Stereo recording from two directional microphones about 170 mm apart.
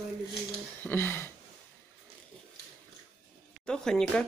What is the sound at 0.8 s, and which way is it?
Speech, 15° left (ahead or behind).